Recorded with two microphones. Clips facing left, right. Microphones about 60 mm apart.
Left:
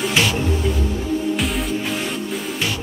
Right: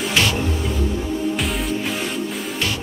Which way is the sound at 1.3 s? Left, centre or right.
Centre.